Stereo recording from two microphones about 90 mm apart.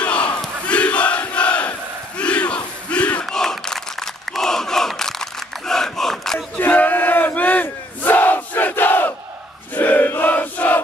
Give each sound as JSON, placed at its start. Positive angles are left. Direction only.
{"t": 0.0, "sound": "crowd", "side_deg": 15}
{"t": 6.6, "sound": "battle cry", "side_deg": 20}
{"t": 9.8, "sound": "a sound", "side_deg": 20}